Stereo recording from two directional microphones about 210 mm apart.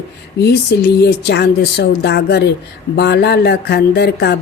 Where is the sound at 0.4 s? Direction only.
50° left (ahead or behind).